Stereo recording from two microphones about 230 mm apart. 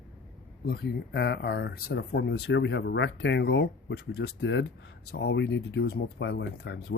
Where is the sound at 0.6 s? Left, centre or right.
Left.